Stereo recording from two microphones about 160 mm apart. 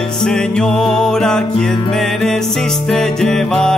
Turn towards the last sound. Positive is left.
turn(degrees=5)  # may be behind; listen again after turning